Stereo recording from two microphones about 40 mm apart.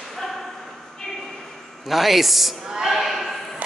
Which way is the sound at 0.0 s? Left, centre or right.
Centre.